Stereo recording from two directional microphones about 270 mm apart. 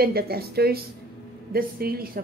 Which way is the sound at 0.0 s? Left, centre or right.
Right.